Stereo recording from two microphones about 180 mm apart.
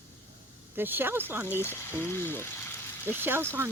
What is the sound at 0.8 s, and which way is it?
Speech, 10° right (ahead or behind).